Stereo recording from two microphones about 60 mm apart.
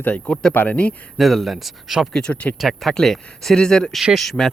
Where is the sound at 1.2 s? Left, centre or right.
Centre.